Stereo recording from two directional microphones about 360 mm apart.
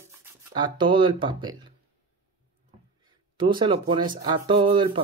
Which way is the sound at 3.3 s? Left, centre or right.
Centre.